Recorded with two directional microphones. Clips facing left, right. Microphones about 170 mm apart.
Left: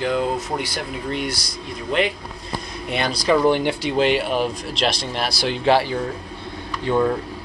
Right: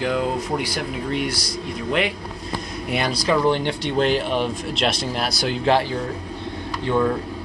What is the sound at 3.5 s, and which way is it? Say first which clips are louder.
Speech: left 2 dB; 10° left (ahead or behind).